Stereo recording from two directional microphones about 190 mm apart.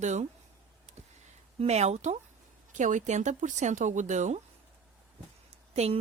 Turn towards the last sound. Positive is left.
turn(degrees=-35)  # may be behind; listen again after turning